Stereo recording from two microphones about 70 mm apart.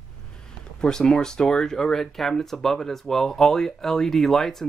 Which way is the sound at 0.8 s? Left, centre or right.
Centre.